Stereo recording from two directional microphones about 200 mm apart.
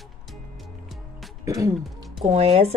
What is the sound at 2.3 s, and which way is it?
Speech, 30° right (ahead or behind).